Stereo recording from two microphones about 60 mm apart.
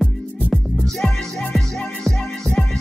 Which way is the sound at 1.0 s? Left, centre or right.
Centre.